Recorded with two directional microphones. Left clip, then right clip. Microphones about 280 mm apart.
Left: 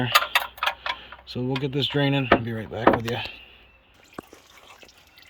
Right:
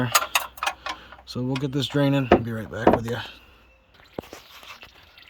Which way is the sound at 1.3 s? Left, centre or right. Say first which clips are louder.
Left 1 dB; right.